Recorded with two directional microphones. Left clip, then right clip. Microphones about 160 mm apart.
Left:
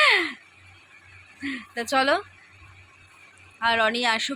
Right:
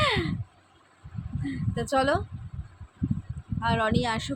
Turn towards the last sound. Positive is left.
turn(degrees=-5)  # may be behind; listen again after turning